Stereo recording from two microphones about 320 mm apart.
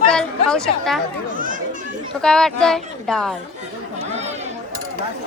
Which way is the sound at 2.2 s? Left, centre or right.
Centre.